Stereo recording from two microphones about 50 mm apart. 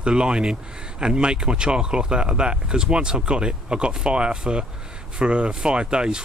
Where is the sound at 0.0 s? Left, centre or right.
Centre.